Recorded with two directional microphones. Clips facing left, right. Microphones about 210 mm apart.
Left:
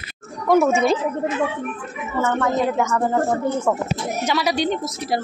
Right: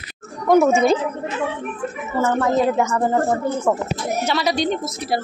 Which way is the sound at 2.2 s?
5° right (ahead or behind).